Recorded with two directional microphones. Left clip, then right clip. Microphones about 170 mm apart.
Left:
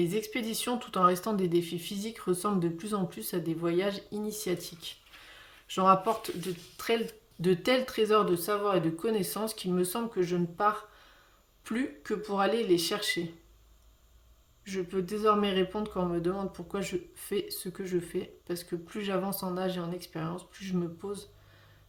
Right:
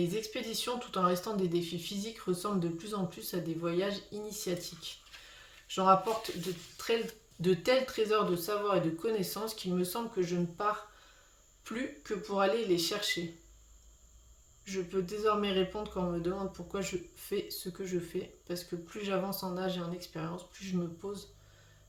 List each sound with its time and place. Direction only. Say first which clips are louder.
0.0 s speech: left 4 dB; 45° left (ahead or behind)
14.6 s speech: left 2 dB; 40° left (ahead or behind)